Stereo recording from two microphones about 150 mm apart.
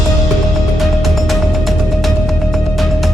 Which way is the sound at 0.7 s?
Centre (ahead or behind).